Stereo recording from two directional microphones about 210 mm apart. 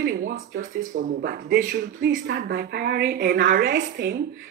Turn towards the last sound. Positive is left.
turn(degrees=-40)  # may be behind; listen again after turning